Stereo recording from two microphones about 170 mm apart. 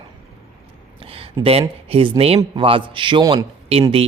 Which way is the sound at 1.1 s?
35° right (ahead or behind).